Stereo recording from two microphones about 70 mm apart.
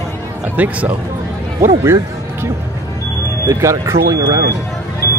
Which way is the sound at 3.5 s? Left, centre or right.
Right.